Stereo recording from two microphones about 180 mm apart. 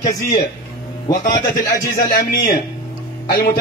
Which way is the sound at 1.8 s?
60° left (ahead or behind).